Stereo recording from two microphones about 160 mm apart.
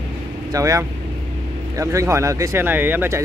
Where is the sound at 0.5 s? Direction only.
20° right (ahead or behind).